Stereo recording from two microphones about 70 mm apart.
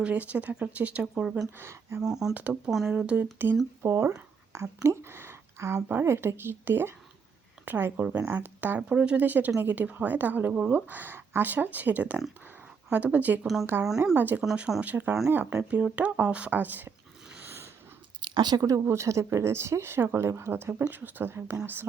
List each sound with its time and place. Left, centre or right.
0.0 s speech: centre
1.5 s speech: right
2.0 s speech: centre
2.3 s speech: right
2.6 s speech: centre
3.3 s speech: right
3.8 s speech: right
17.4 s sniff: right
18.2 s biting: right
18.6 s speech: right
20.9 s speech: right